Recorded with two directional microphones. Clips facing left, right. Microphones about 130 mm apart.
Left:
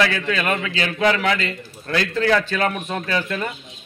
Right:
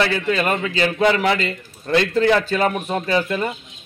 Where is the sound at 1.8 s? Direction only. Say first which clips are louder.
Right 4 dB; 20° right (ahead or behind).